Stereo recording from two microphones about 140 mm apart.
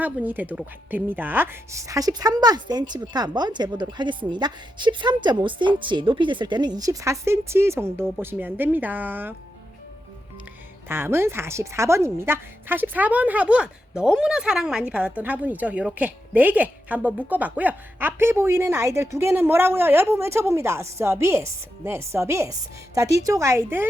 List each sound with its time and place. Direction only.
0.0 s a woman's voice: 10° right (ahead or behind)
10.8 s a woman's voice: 15° right (ahead or behind)